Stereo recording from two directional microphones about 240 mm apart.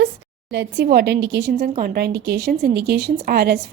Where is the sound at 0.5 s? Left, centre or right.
Right.